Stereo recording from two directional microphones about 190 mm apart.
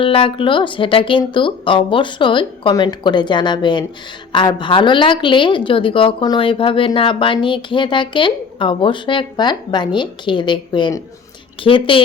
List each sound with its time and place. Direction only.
0.0 s a woman's voice: 30° left (ahead or behind)